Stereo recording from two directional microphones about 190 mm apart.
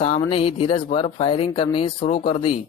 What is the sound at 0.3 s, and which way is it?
A man's voice, 30° left (ahead or behind).